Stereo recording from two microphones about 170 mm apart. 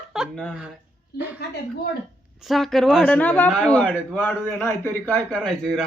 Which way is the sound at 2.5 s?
Centre (ahead or behind).